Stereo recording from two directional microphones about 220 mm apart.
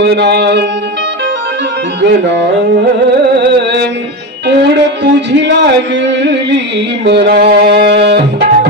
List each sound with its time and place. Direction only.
0.0 s music: 50° right (ahead or behind)
3.3 s music: 50° right (ahead or behind)